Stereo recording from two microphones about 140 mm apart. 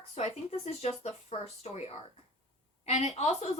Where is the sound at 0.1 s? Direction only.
50° left (ahead or behind).